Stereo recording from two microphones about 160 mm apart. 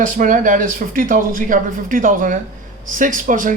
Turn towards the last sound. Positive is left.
turn(degrees=-55)  # may be behind; listen again after turning